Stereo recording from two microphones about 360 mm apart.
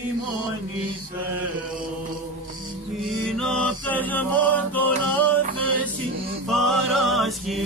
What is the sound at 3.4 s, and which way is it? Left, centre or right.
A capella, centre.